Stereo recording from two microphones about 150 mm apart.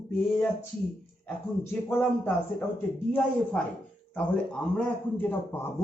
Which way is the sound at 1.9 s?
15° left (ahead or behind).